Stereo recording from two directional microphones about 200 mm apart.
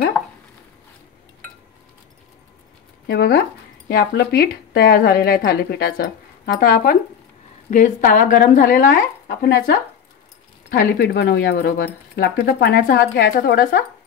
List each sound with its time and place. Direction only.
3.1 s speech: 55° left (ahead or behind)